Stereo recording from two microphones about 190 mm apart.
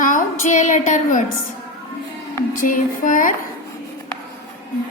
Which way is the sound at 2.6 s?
45° left (ahead or behind).